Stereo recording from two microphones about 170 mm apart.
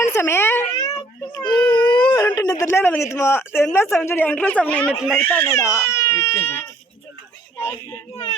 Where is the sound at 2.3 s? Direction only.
20° left (ahead or behind).